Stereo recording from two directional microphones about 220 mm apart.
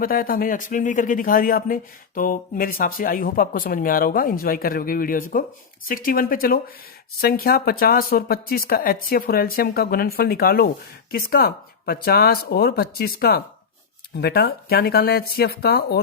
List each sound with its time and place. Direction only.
0.0 s speech: 40° left (ahead or behind)